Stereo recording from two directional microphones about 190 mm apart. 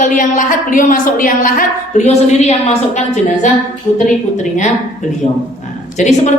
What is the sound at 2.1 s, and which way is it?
Speech, 35° left (ahead or behind).